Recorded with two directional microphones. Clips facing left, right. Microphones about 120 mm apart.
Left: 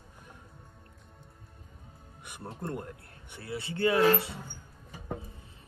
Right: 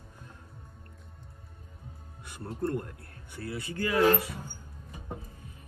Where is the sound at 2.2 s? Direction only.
20° left (ahead or behind).